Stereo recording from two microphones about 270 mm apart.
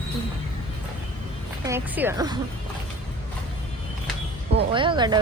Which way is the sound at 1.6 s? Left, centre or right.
Centre.